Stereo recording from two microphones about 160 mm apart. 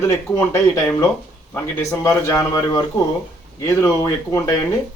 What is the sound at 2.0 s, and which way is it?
Speech, 20° left (ahead or behind).